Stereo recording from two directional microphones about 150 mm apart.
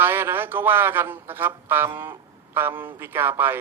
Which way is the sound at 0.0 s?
15° right (ahead or behind).